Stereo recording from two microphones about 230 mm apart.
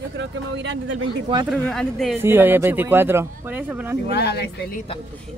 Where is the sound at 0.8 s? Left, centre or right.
Right.